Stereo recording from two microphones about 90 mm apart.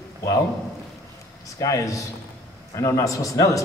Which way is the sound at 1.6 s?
40° left (ahead or behind).